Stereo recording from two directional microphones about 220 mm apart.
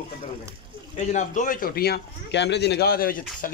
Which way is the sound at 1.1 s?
35° left (ahead or behind).